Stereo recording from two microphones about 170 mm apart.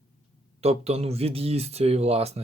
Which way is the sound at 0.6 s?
40° right (ahead or behind).